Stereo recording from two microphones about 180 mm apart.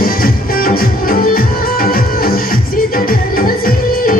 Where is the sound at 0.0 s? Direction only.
55° left (ahead or behind).